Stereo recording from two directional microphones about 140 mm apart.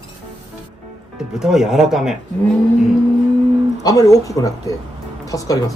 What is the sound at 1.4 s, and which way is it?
Speech, 5° right (ahead or behind).